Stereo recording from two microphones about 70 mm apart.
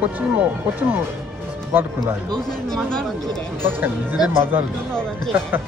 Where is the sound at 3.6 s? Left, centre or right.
Right.